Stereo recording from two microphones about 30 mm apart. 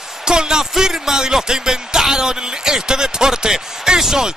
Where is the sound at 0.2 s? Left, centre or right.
Right.